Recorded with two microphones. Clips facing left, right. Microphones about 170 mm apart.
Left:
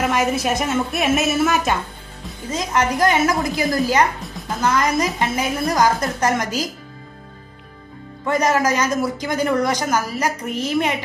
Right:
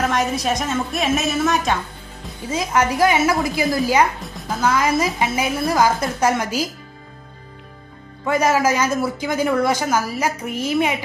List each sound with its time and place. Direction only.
0.0 s a woman's voice: 5° left (ahead or behind)
2.5 s a woman's voice: 10° right (ahead or behind)
8.3 s a woman's voice: 5° right (ahead or behind)